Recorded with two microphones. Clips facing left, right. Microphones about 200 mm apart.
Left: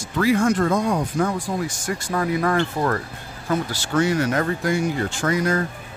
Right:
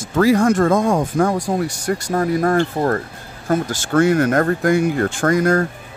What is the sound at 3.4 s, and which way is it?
Speech, 50° right (ahead or behind).